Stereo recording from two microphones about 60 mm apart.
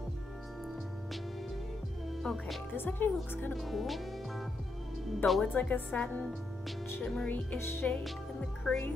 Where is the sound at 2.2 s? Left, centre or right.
Centre.